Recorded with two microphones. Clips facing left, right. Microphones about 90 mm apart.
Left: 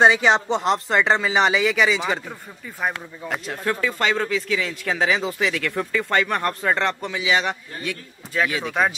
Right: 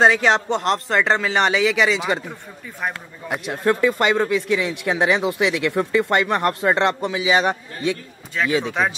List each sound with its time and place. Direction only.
0.0 s speech: centre (ahead or behind)
7.8 s speech: 25° right (ahead or behind)